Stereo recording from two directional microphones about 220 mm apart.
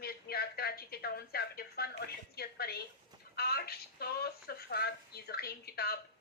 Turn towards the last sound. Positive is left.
turn(degrees=45)  # may be behind; listen again after turning